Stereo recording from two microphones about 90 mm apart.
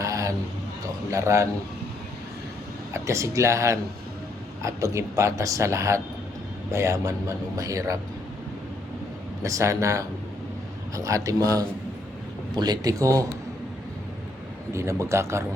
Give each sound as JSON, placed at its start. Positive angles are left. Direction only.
{"t": 0.0, "sound": "a sound", "side_deg": -35}
{"t": 1.1, "sound": "speech", "side_deg": -35}
{"t": 3.1, "sound": "speech", "side_deg": -35}
{"t": 9.4, "sound": "speech", "side_deg": -35}
{"t": 12.5, "sound": "speech", "side_deg": -50}
{"t": 14.7, "sound": "speech", "side_deg": -30}